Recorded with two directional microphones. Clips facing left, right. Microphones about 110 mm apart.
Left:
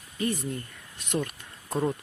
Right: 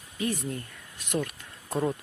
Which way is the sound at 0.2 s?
Centre (ahead or behind).